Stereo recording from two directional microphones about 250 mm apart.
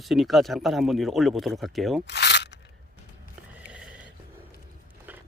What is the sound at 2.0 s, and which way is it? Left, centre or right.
Crunch, left.